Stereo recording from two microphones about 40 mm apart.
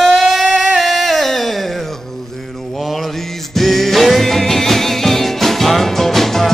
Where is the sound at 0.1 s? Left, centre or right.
Centre.